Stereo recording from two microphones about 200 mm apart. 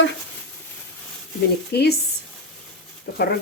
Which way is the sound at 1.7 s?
55° left (ahead or behind).